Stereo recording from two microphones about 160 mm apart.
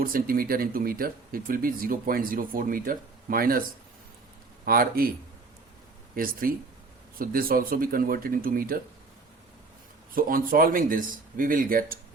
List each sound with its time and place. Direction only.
0.0 s speech: 65° right (ahead or behind)
4.6 s speech: 65° right (ahead or behind)
6.2 s speech: 65° right (ahead or behind)
10.2 s speech: 60° right (ahead or behind)